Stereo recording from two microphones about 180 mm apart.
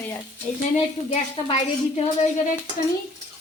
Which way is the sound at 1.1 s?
35° left (ahead or behind).